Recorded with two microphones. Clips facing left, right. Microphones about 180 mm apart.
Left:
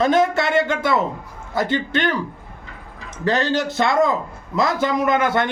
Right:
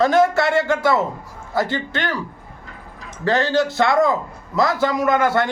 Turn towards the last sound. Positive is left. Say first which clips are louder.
# right 1 dB
turn(degrees=20)  # may be behind; listen again after turning